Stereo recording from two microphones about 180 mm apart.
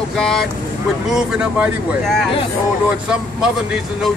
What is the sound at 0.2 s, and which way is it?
Speech, 5° left (ahead or behind).